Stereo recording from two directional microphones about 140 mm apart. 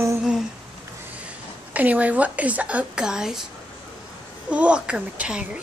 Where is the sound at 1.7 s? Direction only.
10° right (ahead or behind).